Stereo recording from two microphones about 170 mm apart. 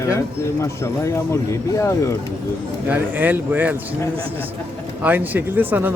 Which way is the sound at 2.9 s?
10° right (ahead or behind).